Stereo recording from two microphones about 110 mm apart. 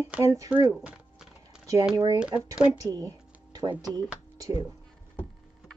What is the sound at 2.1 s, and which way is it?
Speech, 10° right (ahead or behind).